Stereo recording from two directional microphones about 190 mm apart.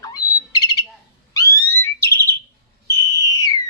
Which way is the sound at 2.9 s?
15° left (ahead or behind).